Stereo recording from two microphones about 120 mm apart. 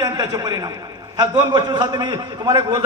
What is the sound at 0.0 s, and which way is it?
Speech, 30° right (ahead or behind).